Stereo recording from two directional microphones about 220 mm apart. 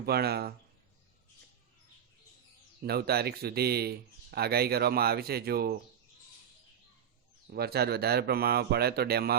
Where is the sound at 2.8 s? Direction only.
45° right (ahead or behind).